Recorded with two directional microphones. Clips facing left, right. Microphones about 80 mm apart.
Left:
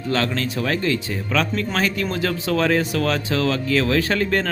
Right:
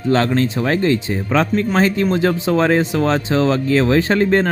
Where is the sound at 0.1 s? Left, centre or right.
Right.